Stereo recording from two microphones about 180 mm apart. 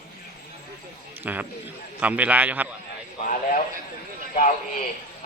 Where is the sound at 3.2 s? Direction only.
45° left (ahead or behind).